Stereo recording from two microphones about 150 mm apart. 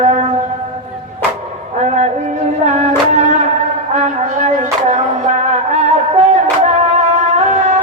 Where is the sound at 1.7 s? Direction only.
50° right (ahead or behind).